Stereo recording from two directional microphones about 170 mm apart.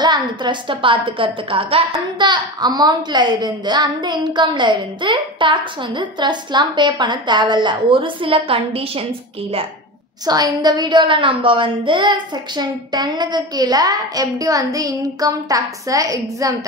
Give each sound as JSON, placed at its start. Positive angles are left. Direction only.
{"t": 0.0, "sound": "a woman's voice", "side_deg": -25}
{"t": 10.2, "sound": "a woman's voice", "side_deg": -25}